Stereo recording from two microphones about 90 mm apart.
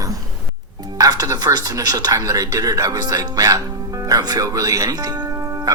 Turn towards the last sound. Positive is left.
turn(degrees=-45)  # may be behind; listen again after turning